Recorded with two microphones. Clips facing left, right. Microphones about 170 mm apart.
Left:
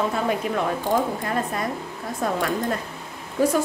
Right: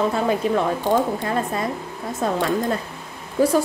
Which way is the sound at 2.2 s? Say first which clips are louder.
Right 2 dB; 25° right (ahead or behind).